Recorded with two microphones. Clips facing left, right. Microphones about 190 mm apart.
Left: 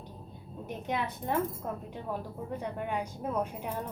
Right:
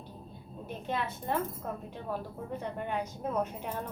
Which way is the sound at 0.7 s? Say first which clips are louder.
Left 1 dB; 15° left (ahead or behind).